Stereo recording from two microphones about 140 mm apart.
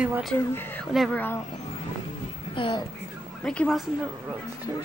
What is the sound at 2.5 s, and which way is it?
Speech, 35° left (ahead or behind).